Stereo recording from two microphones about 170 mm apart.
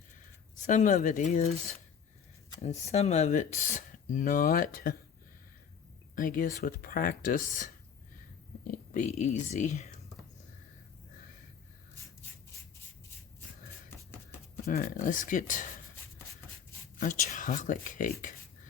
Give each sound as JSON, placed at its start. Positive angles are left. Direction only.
{"t": 0.6, "sound": "speech", "side_deg": 45}
{"t": 2.6, "sound": "speech", "side_deg": 40}
{"t": 6.1, "sound": "speech", "side_deg": 55}
{"t": 15.0, "sound": "speech", "side_deg": 50}
{"t": 17.0, "sound": "speech", "side_deg": 50}